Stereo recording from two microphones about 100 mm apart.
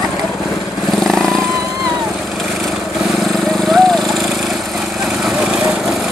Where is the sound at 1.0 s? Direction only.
Centre (ahead or behind).